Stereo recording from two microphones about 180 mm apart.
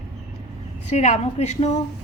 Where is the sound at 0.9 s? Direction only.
40° left (ahead or behind).